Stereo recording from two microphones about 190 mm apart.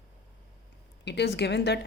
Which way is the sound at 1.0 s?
60° left (ahead or behind).